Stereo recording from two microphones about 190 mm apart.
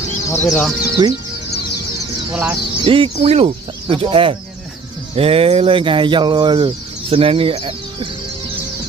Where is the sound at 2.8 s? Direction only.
30° right (ahead or behind).